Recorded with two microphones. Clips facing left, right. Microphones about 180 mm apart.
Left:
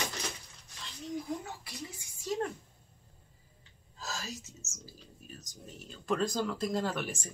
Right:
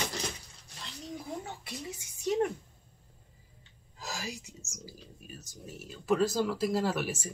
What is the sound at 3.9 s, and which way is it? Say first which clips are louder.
Speech: right 2 dB; 15° right (ahead or behind).